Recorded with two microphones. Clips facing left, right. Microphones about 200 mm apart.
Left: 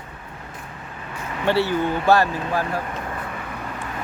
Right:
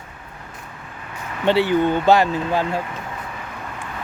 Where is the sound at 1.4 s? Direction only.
20° right (ahead or behind).